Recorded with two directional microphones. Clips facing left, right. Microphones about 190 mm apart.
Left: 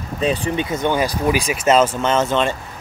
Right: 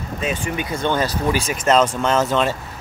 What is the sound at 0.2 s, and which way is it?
Speech, 35° left (ahead or behind).